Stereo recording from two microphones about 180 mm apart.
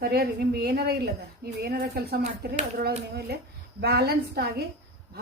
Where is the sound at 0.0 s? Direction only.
60° right (ahead or behind).